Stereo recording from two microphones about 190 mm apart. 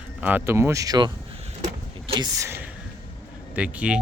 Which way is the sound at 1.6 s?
25° right (ahead or behind).